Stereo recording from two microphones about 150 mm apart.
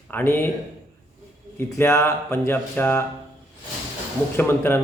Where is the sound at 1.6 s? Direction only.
20° left (ahead or behind).